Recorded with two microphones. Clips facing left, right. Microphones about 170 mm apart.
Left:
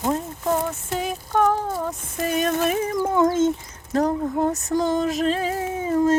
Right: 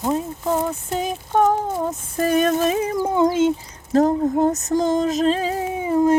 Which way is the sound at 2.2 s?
45° right (ahead or behind).